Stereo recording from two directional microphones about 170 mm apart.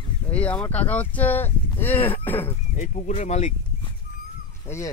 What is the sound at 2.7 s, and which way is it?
Speech, 45° left (ahead or behind).